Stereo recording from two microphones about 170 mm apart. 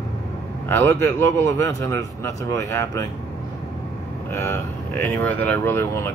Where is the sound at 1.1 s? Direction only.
15° left (ahead or behind).